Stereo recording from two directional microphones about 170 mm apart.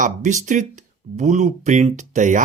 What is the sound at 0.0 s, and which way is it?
Speech, 45° right (ahead or behind).